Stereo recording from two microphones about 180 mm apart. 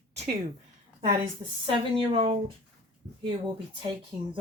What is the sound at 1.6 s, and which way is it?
Speech, 30° right (ahead or behind).